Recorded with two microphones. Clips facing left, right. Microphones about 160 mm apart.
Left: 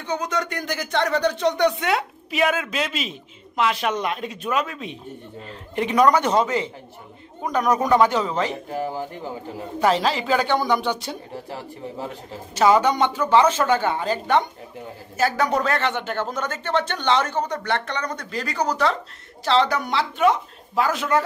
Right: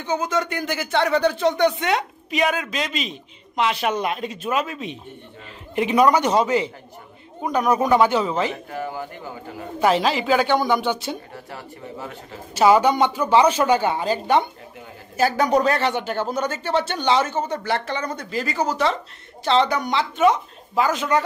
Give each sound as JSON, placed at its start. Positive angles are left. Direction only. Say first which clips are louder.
{"t": 0.0, "sound": "a woman's voice", "louder": "right 2 dB", "side_deg": -5}
{"t": 8.5, "sound": "speech", "louder": "left 1 dB", "side_deg": 30}
{"t": 9.8, "sound": "speech", "louder": "right 1 dB", "side_deg": -5}
{"t": 11.3, "sound": "speech", "louder": "left 3 dB", "side_deg": 30}
{"t": 12.5, "sound": "a woman's voice", "louder": "right 2 dB", "side_deg": -10}